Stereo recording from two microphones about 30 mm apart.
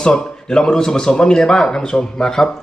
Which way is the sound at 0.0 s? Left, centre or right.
Left.